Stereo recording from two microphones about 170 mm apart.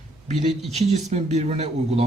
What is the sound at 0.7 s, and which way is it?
Speech, 40° right (ahead or behind).